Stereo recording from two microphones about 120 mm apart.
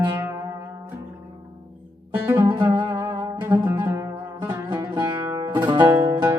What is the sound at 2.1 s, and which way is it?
Music, 20° right (ahead or behind).